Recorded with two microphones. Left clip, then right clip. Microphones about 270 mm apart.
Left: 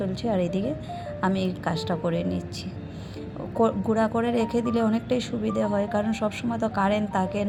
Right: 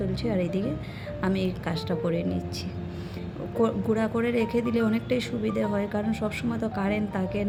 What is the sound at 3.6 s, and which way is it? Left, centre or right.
A woman's voice, centre.